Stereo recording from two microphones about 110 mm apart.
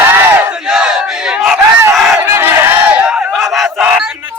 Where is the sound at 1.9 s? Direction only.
Centre (ahead or behind).